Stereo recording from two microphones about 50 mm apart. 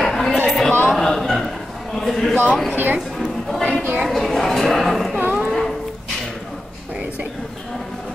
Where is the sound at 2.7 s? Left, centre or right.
Right.